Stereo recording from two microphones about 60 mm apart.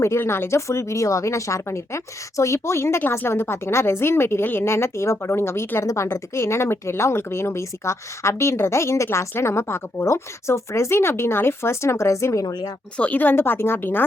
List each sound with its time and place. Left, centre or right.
0.2 s speech: left
5.8 s a woman's voice: left
6.1 s speech: left
13.0 s a woman's voice: left